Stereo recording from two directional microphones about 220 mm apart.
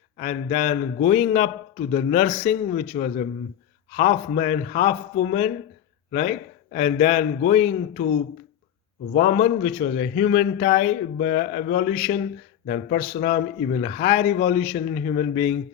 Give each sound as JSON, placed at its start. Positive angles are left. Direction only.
{"t": 0.2, "sound": "a man's voice", "side_deg": 35}
{"t": 9.1, "sound": "a man's voice", "side_deg": 40}